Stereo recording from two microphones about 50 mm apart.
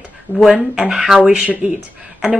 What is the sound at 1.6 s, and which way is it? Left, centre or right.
Speech, right.